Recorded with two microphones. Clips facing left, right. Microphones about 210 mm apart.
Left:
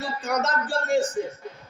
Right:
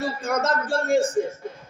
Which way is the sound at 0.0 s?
50° right (ahead or behind).